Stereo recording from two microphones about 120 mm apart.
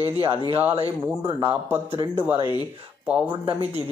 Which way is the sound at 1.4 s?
20° right (ahead or behind).